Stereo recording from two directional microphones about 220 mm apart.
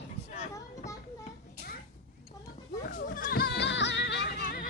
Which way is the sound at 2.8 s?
40° left (ahead or behind).